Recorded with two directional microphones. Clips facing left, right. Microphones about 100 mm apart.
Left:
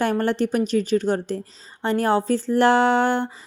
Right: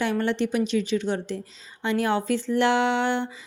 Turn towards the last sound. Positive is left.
turn(degrees=40)  # may be behind; listen again after turning